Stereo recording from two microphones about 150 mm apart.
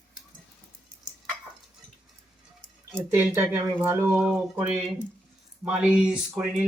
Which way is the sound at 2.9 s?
15° right (ahead or behind).